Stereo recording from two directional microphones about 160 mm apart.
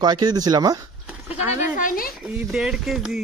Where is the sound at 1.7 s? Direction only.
60° left (ahead or behind).